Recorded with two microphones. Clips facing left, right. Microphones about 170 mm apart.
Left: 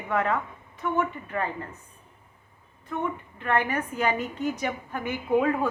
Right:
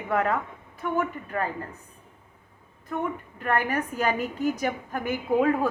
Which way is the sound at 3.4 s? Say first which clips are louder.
Even; 40° right (ahead or behind).